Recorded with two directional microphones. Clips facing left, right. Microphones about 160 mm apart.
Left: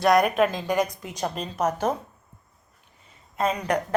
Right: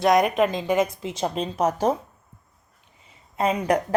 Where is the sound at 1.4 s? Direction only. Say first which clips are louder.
Right 3 dB; 30° right (ahead or behind).